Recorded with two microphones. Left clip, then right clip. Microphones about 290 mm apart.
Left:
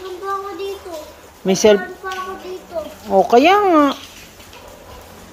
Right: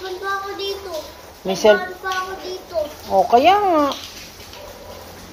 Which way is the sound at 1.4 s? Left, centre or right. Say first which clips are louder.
Left 2 dB; left.